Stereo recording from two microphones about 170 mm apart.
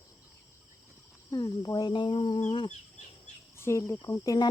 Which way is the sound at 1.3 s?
20° left (ahead or behind).